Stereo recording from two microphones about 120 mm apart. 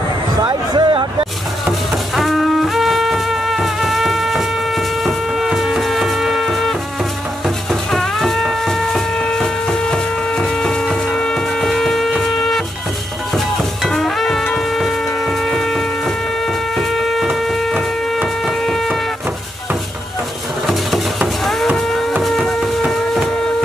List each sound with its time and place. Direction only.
0.4 s a sound: 40° right (ahead or behind)
2.1 s music: centre (ahead or behind)
13.8 s music: centre (ahead or behind)
16.7 s printer: centre (ahead or behind)
20.6 s music: centre (ahead or behind)
22.1 s a sound: centre (ahead or behind)